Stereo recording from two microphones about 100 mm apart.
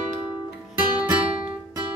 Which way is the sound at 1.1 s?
65° right (ahead or behind).